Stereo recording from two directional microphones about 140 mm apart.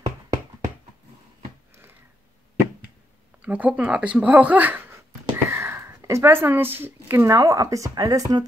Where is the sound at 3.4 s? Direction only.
10° right (ahead or behind).